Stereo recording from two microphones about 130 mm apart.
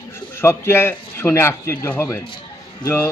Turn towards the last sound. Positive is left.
turn(degrees=15)  # may be behind; listen again after turning